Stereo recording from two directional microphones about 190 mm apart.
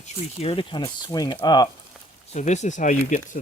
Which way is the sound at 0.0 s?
30° left (ahead or behind).